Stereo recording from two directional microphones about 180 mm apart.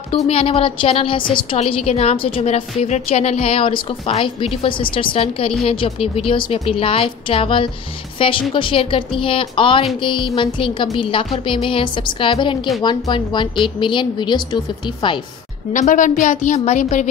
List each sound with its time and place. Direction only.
0.1 s a woman's voice: 30° left (ahead or behind)
15.7 s a woman's voice: 45° left (ahead or behind)